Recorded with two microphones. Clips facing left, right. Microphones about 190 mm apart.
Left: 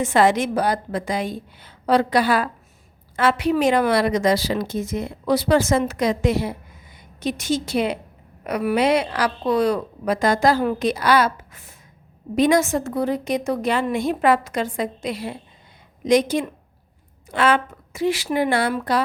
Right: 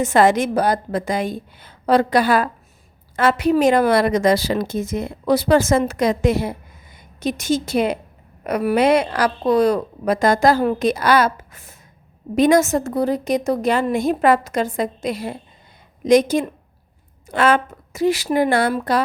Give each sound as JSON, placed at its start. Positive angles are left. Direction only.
{"t": 0.0, "sound": "a woman's voice", "side_deg": -45}